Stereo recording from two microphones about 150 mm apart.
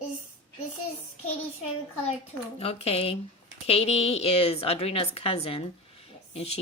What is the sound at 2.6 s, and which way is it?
A woman's voice, 40° left (ahead or behind).